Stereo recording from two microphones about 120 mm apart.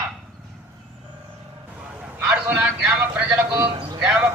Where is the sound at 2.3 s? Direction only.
10° right (ahead or behind).